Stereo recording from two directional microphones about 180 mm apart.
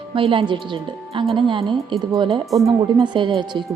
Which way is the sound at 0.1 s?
30° right (ahead or behind).